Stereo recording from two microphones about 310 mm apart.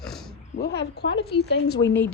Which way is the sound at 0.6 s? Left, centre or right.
Left.